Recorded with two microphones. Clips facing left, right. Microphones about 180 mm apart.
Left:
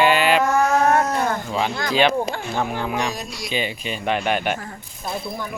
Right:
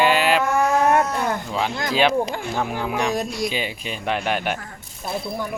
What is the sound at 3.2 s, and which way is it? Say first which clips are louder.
Speech: right 8 dB; 55° right (ahead or behind).